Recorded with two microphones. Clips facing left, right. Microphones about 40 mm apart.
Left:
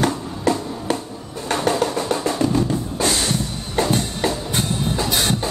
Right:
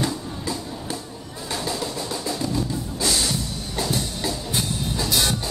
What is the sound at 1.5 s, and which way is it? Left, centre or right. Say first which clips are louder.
Drum: left 8 dB; left.